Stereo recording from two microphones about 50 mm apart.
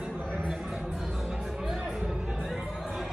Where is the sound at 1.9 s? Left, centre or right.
Centre.